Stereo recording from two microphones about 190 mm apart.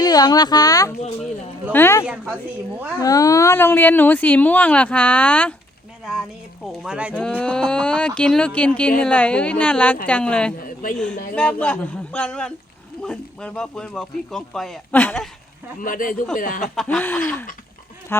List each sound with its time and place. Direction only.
0.0 s speech: 20° left (ahead or behind)
2.0 s a woman's voice: 5° right (ahead or behind)
3.0 s speech: 20° left (ahead or behind)
6.8 s speech: 5° right (ahead or behind)
7.2 s speech: 5° left (ahead or behind)
10.6 s a man's voice: 45° left (ahead or behind)
10.9 s speech: 5° left (ahead or behind)
15.8 s speech: 45° left (ahead or behind)
16.7 s speech: 5° left (ahead or behind)